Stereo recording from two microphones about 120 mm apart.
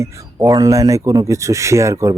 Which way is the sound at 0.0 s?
30° right (ahead or behind).